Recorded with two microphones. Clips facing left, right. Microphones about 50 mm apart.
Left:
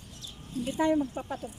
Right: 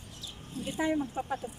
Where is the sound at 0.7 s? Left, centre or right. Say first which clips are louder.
Left 4 dB; centre.